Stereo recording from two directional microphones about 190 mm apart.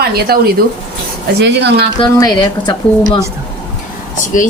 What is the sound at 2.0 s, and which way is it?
A woman's voice, 20° left (ahead or behind).